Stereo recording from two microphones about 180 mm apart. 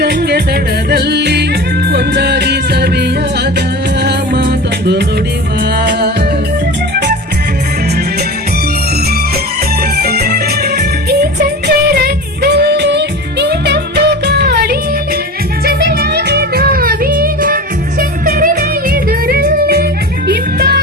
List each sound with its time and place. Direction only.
0.0 s music: 60° right (ahead or behind)
0.9 s yodeling: 65° right (ahead or behind)
1.9 s music: 65° right (ahead or behind)
4.0 s music: 70° right (ahead or behind)
10.0 s music: 60° right (ahead or behind)
19.3 s yodeling: 60° right (ahead or behind)
20.2 s music: 60° right (ahead or behind)